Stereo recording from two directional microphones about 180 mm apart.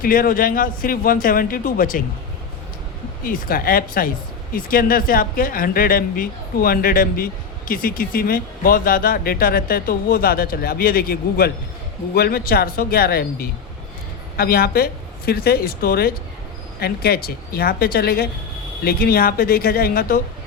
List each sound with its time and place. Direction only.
0.0 s speech: 50° left (ahead or behind)
3.2 s speech: 50° left (ahead or behind)